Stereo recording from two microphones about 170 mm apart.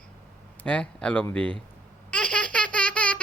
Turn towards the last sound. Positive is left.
turn(degrees=5)  # may be behind; listen again after turning